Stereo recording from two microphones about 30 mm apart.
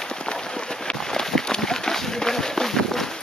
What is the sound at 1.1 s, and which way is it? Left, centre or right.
Run, centre.